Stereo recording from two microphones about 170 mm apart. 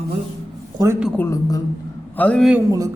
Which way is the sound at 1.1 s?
15° left (ahead or behind).